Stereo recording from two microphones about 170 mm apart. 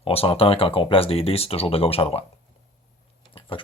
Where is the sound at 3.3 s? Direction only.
30° left (ahead or behind).